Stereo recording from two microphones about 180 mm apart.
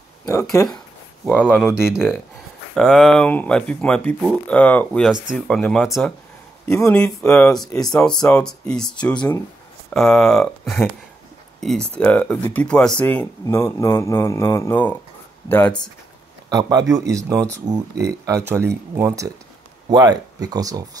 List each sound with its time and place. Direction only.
0.3 s speech: 15° left (ahead or behind)
1.2 s speech: 5° right (ahead or behind)
1.5 s speech: 10° left (ahead or behind)
1.8 s speech: 5° right (ahead or behind)
16.4 s speech: 20° right (ahead or behind)
18.5 s speech: 15° right (ahead or behind)